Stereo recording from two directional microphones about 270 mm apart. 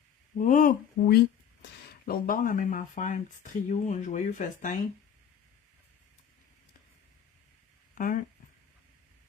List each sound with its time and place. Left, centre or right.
0.3 s speech: left
7.9 s speech: left